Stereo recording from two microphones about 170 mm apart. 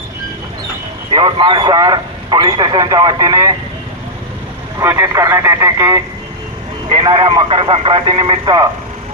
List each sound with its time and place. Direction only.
1.1 s a man's voice: 30° right (ahead or behind)
4.8 s speech: 15° right (ahead or behind)
6.8 s a man's voice: 30° right (ahead or behind)